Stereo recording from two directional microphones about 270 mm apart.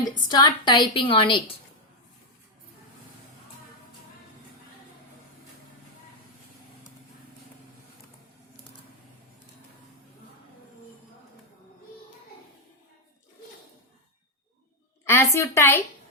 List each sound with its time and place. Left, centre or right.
0.3 s a woman's voice: centre
15.0 s a woman's voice: centre